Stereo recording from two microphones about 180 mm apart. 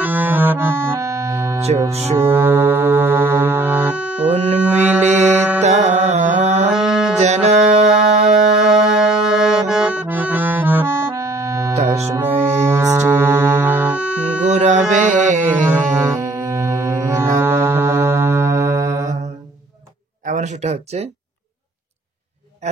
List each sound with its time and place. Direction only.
0.0 s music: 10° right (ahead or behind)
1.9 s speech: 35° right (ahead or behind)
2.1 s music: 15° right (ahead or behind)
4.6 s mantra: 5° right (ahead or behind)
5.0 s music: 40° right (ahead or behind)
6.7 s music: centre (ahead or behind)
7.2 s music: 40° right (ahead or behind)
8.5 s accordion: centre (ahead or behind)
11.8 s music: 15° right (ahead or behind)
14.4 s music: 40° right (ahead or behind)
16.0 s music: 15° right (ahead or behind)
20.2 s a sound: 40° right (ahead or behind)